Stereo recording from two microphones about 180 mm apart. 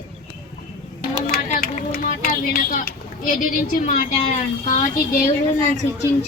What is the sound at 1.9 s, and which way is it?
A woman's voice, 55° left (ahead or behind).